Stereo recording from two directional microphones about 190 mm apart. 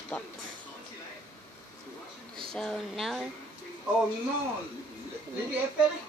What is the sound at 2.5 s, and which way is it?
Speech, centre (ahead or behind).